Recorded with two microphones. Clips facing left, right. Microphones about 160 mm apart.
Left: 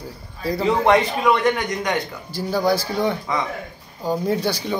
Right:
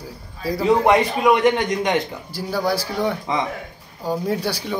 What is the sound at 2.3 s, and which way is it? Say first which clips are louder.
Speech: left 2 dB; 5° right (ahead or behind).